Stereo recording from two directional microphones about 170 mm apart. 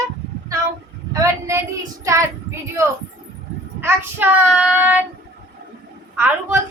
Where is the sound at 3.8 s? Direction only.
10° right (ahead or behind).